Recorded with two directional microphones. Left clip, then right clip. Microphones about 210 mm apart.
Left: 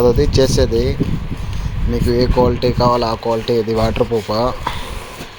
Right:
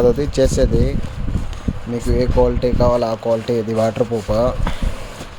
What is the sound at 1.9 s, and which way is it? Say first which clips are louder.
Speech: left 2 dB; 5° right (ahead or behind).